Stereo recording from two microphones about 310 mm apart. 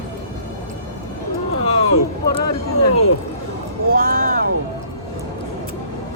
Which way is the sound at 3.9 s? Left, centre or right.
Right.